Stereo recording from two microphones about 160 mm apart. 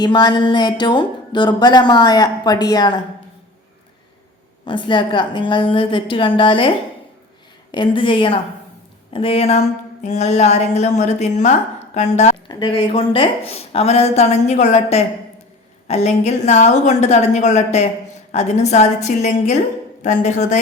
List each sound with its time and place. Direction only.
0.0 s speech: 25° left (ahead or behind)
4.6 s a woman's voice: 30° left (ahead or behind)
12.5 s a woman's voice: 30° left (ahead or behind); by 20.6 s 45° left (ahead or behind)